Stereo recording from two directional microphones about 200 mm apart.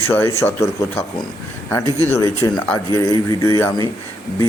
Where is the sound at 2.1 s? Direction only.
15° left (ahead or behind).